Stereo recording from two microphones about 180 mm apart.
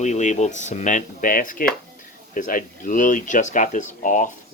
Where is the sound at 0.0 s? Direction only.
40° left (ahead or behind).